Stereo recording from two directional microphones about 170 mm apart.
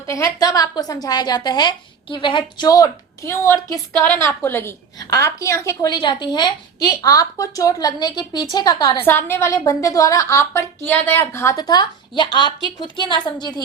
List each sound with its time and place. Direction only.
0.1 s a woman's voice: 20° left (ahead or behind)
9.0 s a woman's voice: 15° left (ahead or behind)